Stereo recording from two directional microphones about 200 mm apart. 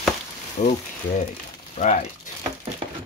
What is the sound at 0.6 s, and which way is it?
Speech, 35° left (ahead or behind).